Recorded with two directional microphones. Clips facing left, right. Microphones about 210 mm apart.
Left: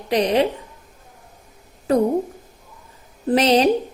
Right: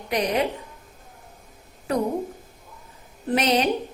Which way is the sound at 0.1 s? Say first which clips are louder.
Left 6 dB; 30° left (ahead or behind).